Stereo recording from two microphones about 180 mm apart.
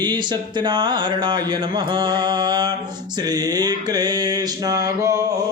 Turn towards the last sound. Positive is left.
turn(degrees=-20)  # may be behind; listen again after turning